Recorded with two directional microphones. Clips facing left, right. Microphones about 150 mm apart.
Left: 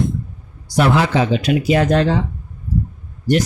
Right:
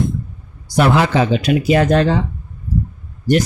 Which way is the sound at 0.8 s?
55° right (ahead or behind).